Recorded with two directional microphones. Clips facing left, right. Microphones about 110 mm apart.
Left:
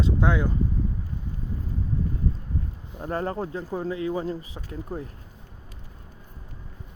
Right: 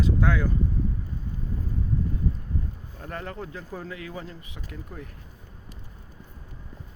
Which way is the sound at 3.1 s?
35° left (ahead or behind).